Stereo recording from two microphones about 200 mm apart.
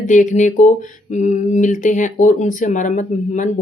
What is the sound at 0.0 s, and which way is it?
Speech, 40° left (ahead or behind).